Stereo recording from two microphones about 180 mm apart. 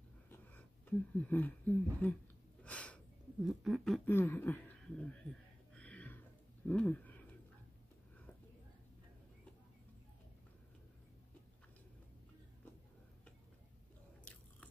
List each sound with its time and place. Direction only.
0.3 s speech: 10° left (ahead or behind)
2.6 s a sound: 5° left (ahead or behind)
4.1 s speech: 10° left (ahead or behind)
5.8 s a sound: 5° left (ahead or behind)
6.7 s speech: 10° left (ahead or behind)
14.2 s biting: 5° left (ahead or behind)